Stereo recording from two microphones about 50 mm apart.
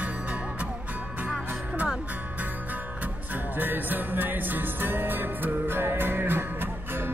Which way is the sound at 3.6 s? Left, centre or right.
Right.